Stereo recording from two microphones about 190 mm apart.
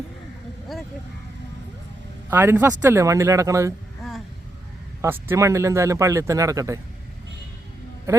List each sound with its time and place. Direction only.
0.7 s vehicle: centre (ahead or behind)
2.3 s speech: 10° right (ahead or behind)
5.0 s speech: 10° right (ahead or behind)